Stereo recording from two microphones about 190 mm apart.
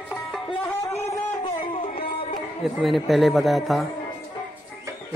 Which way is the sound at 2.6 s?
Centre (ahead or behind).